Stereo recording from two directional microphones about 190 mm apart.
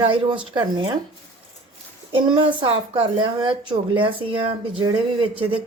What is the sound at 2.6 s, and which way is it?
Speech, 25° right (ahead or behind).